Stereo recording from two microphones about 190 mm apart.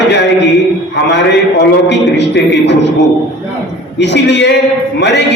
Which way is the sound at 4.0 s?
65° left (ahead or behind).